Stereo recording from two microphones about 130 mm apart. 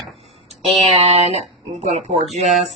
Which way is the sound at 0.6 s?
50° right (ahead or behind).